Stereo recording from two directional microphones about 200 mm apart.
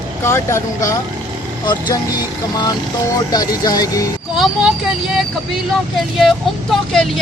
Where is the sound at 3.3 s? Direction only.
20° left (ahead or behind).